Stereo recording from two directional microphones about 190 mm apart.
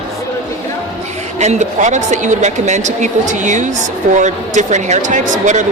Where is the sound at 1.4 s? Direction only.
40° right (ahead or behind).